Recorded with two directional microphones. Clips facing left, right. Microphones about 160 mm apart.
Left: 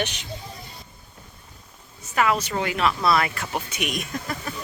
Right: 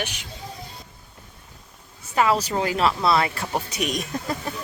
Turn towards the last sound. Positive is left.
turn(degrees=-30)  # may be behind; listen again after turning